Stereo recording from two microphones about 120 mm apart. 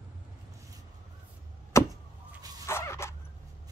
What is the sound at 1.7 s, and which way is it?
Vehicle, 25° left (ahead or behind).